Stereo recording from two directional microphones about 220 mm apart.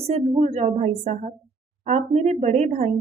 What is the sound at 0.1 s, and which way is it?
Speech, 30° right (ahead or behind).